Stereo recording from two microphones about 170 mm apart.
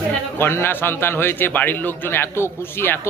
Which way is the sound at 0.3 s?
15° left (ahead or behind).